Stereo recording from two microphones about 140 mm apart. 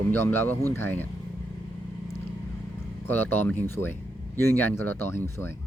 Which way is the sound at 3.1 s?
15° left (ahead or behind).